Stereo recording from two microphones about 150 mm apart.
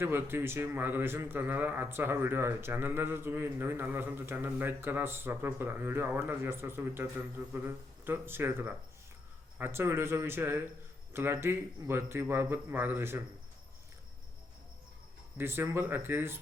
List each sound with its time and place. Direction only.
0.0 s a man's voice: 15° right (ahead or behind)
15.4 s a man's voice: 15° right (ahead or behind)